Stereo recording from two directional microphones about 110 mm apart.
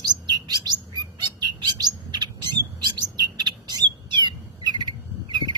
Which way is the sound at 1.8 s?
40° right (ahead or behind).